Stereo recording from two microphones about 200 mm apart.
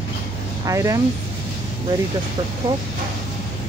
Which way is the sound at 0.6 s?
15° right (ahead or behind).